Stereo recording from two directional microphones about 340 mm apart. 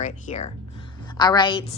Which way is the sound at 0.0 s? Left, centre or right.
Left.